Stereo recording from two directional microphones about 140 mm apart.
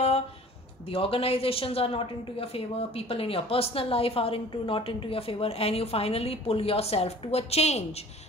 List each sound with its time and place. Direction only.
0.8 s a woman's voice: 40° left (ahead or behind)